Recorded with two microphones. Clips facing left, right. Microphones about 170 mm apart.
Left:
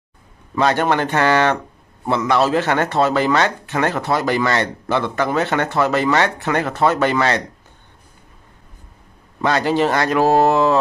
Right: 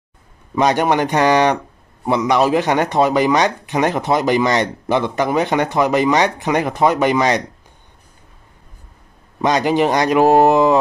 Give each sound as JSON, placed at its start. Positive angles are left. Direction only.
{"t": 0.6, "sound": "speech", "side_deg": -15}
{"t": 9.4, "sound": "speech", "side_deg": -15}